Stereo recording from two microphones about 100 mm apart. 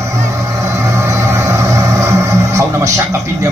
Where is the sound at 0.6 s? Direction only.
30° right (ahead or behind).